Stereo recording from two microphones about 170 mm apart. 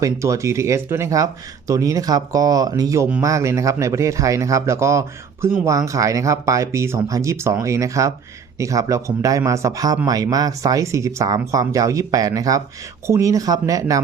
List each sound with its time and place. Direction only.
0.0 s speech: 20° right (ahead or behind)